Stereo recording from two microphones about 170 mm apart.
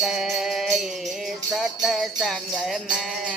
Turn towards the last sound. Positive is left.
turn(degrees=0)  # may be behind; listen again after turning